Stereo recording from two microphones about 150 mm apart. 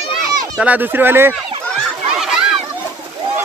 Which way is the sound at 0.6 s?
10° right (ahead or behind).